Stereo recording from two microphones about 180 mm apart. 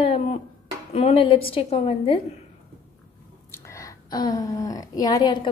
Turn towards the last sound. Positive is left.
turn(degrees=25)  # may be behind; listen again after turning